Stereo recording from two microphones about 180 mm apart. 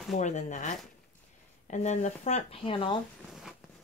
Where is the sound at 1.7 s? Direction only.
40° left (ahead or behind).